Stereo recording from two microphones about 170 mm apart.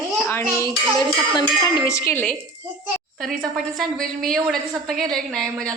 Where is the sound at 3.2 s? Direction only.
Centre (ahead or behind).